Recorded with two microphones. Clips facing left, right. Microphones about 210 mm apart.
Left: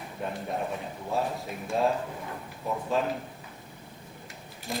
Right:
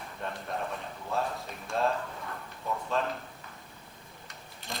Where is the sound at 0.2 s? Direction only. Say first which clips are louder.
Left 4 dB; 10° left (ahead or behind).